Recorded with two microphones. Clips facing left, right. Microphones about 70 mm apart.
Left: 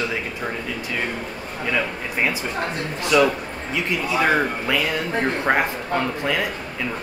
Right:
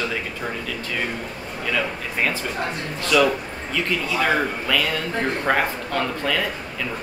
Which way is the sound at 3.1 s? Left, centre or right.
Centre.